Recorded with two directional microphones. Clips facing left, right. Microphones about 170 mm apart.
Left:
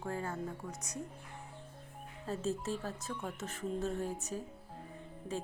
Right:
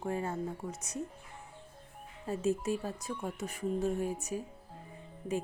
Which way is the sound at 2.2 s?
15° right (ahead or behind).